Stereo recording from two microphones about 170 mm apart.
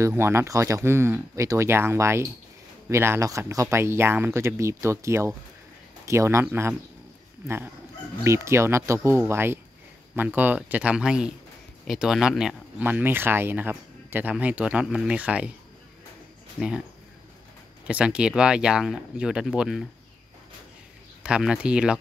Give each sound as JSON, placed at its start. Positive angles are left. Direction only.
{"t": 0.0, "sound": "speech", "side_deg": -15}
{"t": 7.4, "sound": "speech", "side_deg": -15}
{"t": 16.5, "sound": "speech", "side_deg": -5}
{"t": 17.8, "sound": "speech", "side_deg": -5}
{"t": 21.2, "sound": "speech", "side_deg": -5}